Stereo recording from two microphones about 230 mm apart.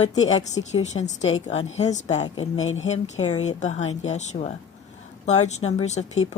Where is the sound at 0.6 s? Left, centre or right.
Left.